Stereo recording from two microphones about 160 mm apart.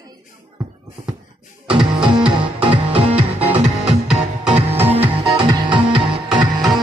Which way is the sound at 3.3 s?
10° right (ahead or behind).